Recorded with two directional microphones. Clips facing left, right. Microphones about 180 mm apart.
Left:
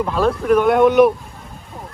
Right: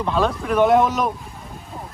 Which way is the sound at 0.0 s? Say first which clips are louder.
Left 3 dB; 5° left (ahead or behind).